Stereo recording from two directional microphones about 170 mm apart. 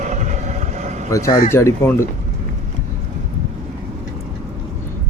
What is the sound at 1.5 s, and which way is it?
Speech, 15° left (ahead or behind).